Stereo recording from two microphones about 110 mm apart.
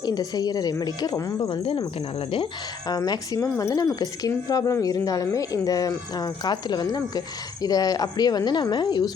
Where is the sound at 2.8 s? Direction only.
35° left (ahead or behind).